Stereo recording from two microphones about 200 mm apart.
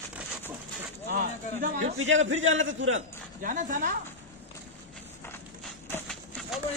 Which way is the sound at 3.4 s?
40° right (ahead or behind).